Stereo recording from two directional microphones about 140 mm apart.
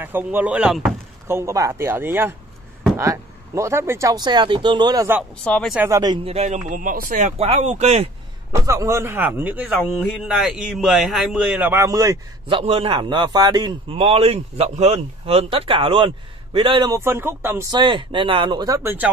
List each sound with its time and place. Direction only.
0.0 s a man's voice: 15° right (ahead or behind)
1.2 s a man's voice: 20° right (ahead or behind)
5.4 s speech: 5° left (ahead or behind)
5.8 s speech: 20° right (ahead or behind)
6.2 s speech: 50° right (ahead or behind)
6.7 s speech: 80° right; by 7.4 s 60° right (ahead or behind)
7.4 s speech: 45° right (ahead or behind)
8.5 s a man's voice: 20° right (ahead or behind)
12.4 s a man's voice: 40° right (ahead or behind)
17.0 s a man's voice: 15° right (ahead or behind)
17.6 s a man's voice: 35° right (ahead or behind); by 19.0 s 20° right (ahead or behind)